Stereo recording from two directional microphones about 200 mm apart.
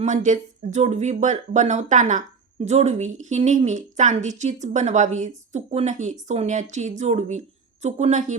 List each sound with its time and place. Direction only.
0.0 s speech: 35° right (ahead or behind)